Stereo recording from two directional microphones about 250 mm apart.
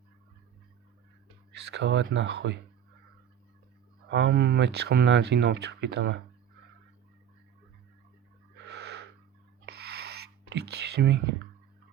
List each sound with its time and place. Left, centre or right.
1.5 s speech: right
4.1 s speech: right
8.6 s a sound: right